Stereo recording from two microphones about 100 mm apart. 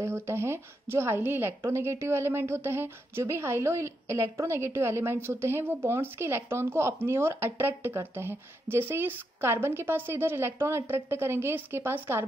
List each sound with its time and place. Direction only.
0.0 s a woman's voice: 25° right (ahead or behind)